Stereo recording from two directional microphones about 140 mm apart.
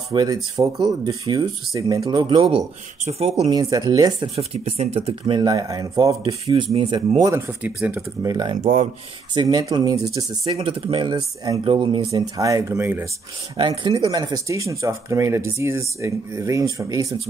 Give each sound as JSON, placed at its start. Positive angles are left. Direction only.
{"t": 0.1, "sound": "speech", "side_deg": -30}
{"t": 3.4, "sound": "speech", "side_deg": -25}
{"t": 4.4, "sound": "speech", "side_deg": -50}
{"t": 6.4, "sound": "speech", "side_deg": -45}
{"t": 7.2, "sound": "speech", "side_deg": -20}
{"t": 8.2, "sound": "speech", "side_deg": -25}
{"t": 8.5, "sound": "speech", "side_deg": -45}
{"t": 9.3, "sound": "speech", "side_deg": -30}
{"t": 10.5, "sound": "speech", "side_deg": -40}
{"t": 12.1, "sound": "speech", "side_deg": -25}
{"t": 13.6, "sound": "speech", "side_deg": -35}